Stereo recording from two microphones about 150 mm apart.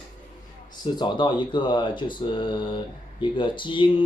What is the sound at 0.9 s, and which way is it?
Speech, 30° left (ahead or behind).